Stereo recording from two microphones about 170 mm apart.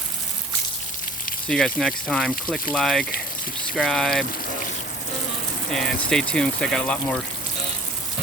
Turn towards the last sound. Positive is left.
turn(degrees=5)  # may be behind; listen again after turning